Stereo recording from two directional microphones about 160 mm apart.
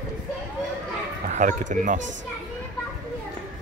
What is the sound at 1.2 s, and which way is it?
Speech, 55° right (ahead or behind).